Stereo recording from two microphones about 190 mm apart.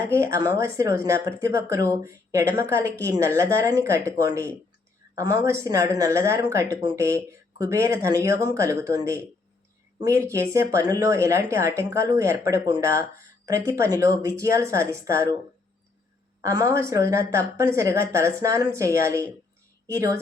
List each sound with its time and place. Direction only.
0.1 s speech: 15° right (ahead or behind)
16.4 s speech: 15° right (ahead or behind)